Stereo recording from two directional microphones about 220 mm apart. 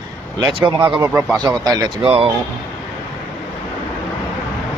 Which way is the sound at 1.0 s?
10° right (ahead or behind).